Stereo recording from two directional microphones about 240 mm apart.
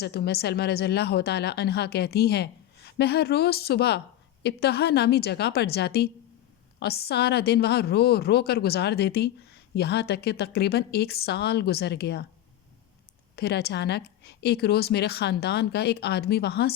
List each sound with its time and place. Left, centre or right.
0.0 s a woman's voice: left
13.3 s a woman's voice: left